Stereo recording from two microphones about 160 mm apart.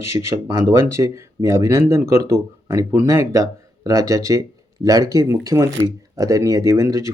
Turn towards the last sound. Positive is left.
turn(degrees=-20)  # may be behind; listen again after turning